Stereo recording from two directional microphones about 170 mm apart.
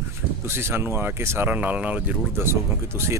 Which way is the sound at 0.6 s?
15° right (ahead or behind).